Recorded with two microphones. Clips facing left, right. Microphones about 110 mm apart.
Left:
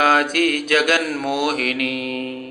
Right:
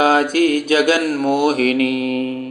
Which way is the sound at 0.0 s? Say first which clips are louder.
Right 3 dB; 20° right (ahead or behind).